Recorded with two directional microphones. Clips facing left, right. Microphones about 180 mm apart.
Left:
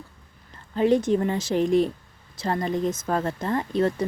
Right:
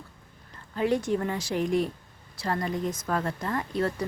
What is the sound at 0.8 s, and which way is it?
Speech, 25° left (ahead or behind).